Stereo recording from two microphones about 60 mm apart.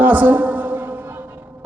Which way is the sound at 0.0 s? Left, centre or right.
Right.